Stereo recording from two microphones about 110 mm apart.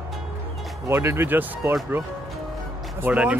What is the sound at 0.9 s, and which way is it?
Speech, 20° right (ahead or behind).